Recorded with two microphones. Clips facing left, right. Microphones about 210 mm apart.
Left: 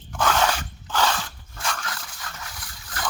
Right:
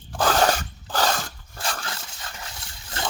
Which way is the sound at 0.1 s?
35° right (ahead or behind).